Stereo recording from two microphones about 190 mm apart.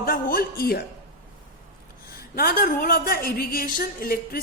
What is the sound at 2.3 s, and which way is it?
A woman's voice, 50° left (ahead or behind).